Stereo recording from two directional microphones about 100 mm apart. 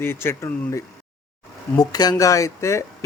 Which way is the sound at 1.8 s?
40° left (ahead or behind).